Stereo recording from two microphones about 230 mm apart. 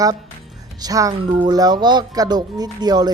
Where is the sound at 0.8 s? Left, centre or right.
Centre.